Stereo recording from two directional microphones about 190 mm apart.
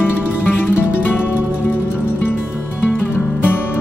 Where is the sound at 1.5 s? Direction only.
5° right (ahead or behind).